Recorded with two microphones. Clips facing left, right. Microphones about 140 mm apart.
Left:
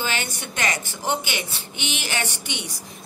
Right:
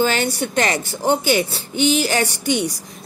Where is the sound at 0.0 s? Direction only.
40° right (ahead or behind).